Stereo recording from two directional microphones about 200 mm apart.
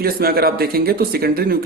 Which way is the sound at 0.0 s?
50° right (ahead or behind).